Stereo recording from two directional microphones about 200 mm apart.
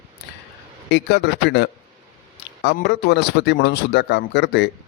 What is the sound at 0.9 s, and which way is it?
Speech, 60° left (ahead or behind).